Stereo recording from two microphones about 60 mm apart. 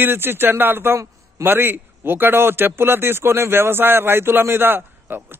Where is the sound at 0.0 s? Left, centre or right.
Right.